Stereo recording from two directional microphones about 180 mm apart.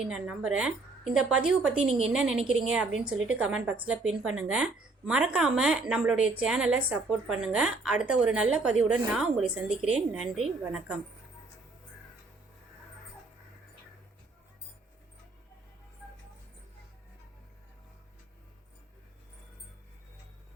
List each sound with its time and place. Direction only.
0.1 s a woman's voice: 5° right (ahead or behind)